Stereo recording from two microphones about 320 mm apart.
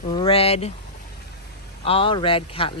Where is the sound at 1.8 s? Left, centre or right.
Centre.